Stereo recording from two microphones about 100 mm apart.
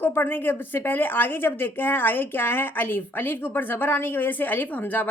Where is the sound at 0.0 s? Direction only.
20° left (ahead or behind).